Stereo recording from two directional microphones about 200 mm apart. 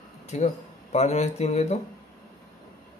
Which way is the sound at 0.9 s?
35° left (ahead or behind).